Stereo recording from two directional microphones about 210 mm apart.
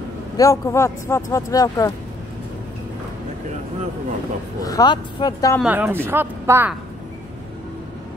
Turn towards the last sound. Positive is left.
turn(degrees=-10)  # may be behind; listen again after turning